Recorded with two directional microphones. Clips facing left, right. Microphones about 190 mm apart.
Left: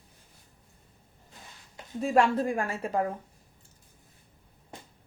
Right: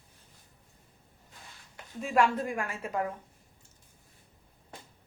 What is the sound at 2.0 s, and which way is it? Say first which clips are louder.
Speech: left 3 dB; 35° left (ahead or behind).